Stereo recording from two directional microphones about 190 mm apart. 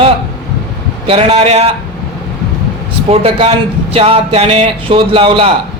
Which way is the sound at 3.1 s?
30° right (ahead or behind).